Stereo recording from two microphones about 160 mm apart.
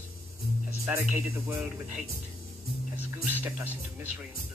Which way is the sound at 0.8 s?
10° right (ahead or behind).